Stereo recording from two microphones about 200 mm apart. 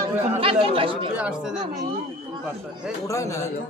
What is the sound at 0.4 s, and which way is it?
Speech, 25° right (ahead or behind).